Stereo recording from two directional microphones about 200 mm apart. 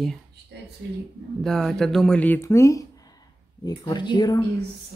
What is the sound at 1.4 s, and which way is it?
Speech, centre (ahead or behind).